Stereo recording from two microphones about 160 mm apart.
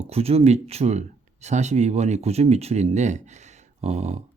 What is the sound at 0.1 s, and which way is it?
Speech, 40° right (ahead or behind).